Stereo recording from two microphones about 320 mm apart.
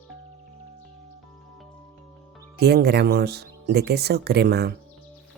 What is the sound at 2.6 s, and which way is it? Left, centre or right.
Speech, right.